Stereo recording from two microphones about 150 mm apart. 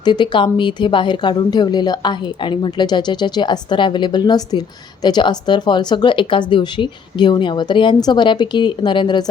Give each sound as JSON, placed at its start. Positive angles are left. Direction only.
{"t": 0.0, "sound": "speech", "side_deg": 30}